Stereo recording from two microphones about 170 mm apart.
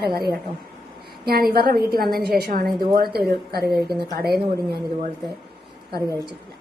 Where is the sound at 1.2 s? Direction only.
65° right (ahead or behind).